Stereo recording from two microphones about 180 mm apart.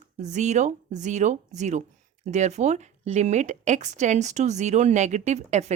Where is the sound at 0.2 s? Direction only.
40° right (ahead or behind).